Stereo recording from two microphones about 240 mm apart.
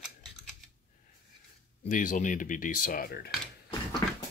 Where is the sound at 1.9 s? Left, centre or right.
Left.